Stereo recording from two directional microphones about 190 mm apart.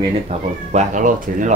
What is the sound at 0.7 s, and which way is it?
Speech, 40° right (ahead or behind).